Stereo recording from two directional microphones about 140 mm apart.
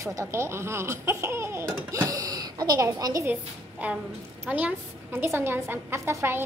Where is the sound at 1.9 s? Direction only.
25° right (ahead or behind).